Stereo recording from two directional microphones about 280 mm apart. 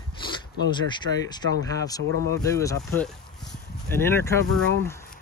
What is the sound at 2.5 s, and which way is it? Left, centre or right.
Speech, centre.